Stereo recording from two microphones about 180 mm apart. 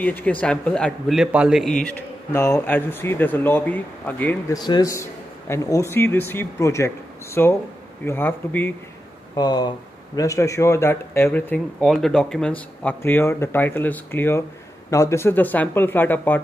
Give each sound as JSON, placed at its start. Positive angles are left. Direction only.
{"t": 0.0, "sound": "a man's voice", "side_deg": 10}
{"t": 2.3, "sound": "speech", "side_deg": 15}
{"t": 4.6, "sound": "speech", "side_deg": 20}
{"t": 9.3, "sound": "speech", "side_deg": 20}